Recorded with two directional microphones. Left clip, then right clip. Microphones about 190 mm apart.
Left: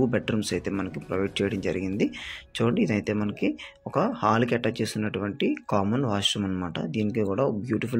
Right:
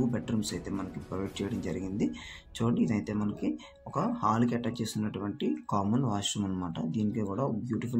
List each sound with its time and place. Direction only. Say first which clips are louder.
0.1 s speech: left 8 dB; 25° left (ahead or behind)